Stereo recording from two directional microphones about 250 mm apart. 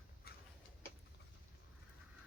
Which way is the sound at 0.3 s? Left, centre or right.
Left.